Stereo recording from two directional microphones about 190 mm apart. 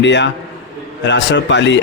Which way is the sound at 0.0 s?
70° left (ahead or behind).